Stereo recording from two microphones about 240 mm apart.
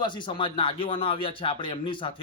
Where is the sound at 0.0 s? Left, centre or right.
Centre.